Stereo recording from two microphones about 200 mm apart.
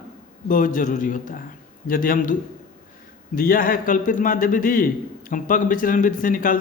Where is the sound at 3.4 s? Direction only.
45° left (ahead or behind).